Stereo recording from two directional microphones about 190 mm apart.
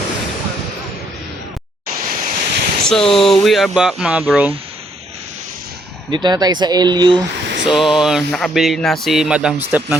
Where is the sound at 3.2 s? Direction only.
Centre (ahead or behind).